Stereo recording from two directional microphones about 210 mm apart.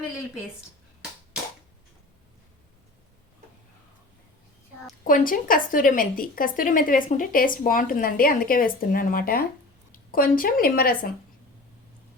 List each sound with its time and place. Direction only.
5.0 s a woman's voice: 40° left (ahead or behind)